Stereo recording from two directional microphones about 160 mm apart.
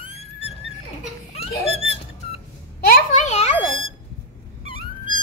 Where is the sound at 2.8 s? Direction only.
70° left (ahead or behind).